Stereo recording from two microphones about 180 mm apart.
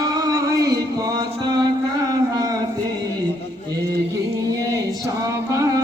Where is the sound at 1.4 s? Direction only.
25° right (ahead or behind).